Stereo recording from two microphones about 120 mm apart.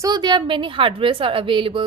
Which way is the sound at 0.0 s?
35° right (ahead or behind).